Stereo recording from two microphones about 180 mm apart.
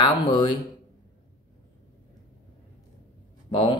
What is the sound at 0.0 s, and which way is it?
Speech, 25° left (ahead or behind).